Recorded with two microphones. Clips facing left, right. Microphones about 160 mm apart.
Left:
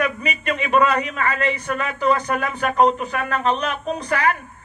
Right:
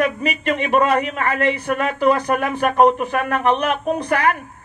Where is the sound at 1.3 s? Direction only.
60° right (ahead or behind).